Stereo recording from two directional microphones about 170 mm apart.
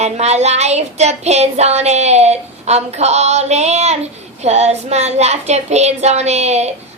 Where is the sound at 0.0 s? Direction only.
40° right (ahead or behind).